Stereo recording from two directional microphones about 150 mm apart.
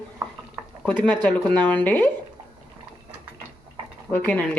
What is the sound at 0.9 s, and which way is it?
A woman's voice, 10° left (ahead or behind).